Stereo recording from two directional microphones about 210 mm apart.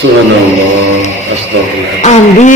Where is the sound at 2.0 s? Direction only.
35° left (ahead or behind).